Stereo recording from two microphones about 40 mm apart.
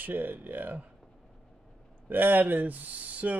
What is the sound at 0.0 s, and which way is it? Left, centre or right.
Speech, right.